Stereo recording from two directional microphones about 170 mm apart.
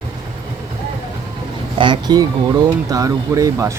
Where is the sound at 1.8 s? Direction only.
25° right (ahead or behind).